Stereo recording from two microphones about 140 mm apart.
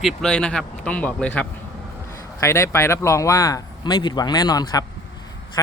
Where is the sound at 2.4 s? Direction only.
20° left (ahead or behind).